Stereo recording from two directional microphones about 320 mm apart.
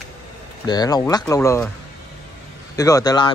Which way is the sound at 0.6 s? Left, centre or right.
Centre.